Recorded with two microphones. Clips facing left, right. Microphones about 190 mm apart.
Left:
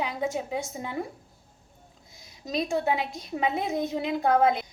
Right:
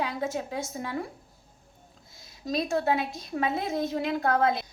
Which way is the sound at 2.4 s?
15° left (ahead or behind).